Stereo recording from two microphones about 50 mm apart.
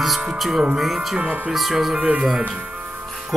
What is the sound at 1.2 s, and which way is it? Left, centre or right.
Speech, right.